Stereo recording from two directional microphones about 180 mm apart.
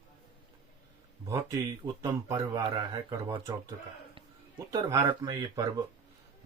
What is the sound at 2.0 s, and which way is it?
Speech, 25° right (ahead or behind).